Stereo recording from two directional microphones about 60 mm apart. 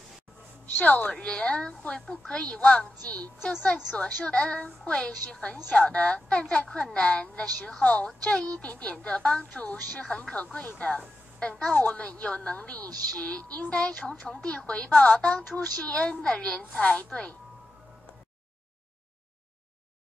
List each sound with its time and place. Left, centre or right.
0.7 s a woman's voice: left
1.1 s a woman's voice: centre
10.0 s a woman's voice: centre
10.3 s a woman's voice: left
11.0 s a woman's voice: centre